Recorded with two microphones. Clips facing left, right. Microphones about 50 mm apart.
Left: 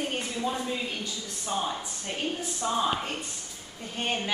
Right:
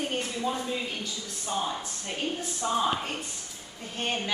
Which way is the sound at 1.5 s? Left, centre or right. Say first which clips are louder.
Even; centre.